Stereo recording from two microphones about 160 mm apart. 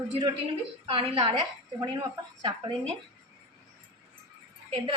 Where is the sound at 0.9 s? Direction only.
30° right (ahead or behind).